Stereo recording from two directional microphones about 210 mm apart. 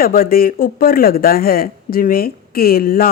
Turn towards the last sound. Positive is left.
turn(degrees=45)  # may be behind; listen again after turning